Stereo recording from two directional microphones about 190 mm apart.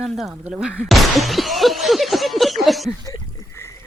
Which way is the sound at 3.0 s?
15° left (ahead or behind).